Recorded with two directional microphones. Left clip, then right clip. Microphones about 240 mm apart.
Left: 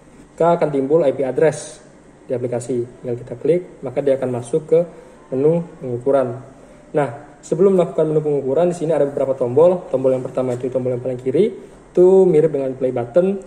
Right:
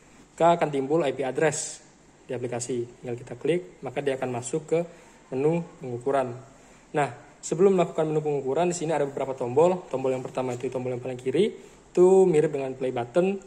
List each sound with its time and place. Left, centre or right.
0.4 s a man's voice: right
6.9 s a man's voice: right